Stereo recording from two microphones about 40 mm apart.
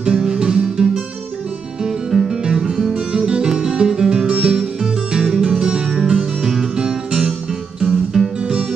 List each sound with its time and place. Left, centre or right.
0.0 s music: centre